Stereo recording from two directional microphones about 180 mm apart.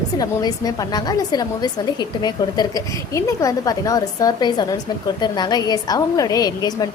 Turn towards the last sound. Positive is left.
turn(degrees=20)  # may be behind; listen again after turning